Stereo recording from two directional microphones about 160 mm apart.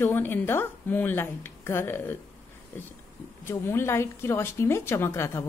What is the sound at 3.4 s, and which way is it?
A woman's voice, 15° left (ahead or behind).